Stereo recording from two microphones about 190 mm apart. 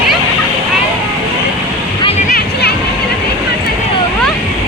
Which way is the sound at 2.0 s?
35° left (ahead or behind).